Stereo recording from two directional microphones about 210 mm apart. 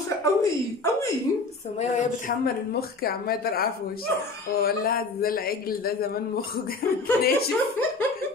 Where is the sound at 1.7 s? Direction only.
35° left (ahead or behind).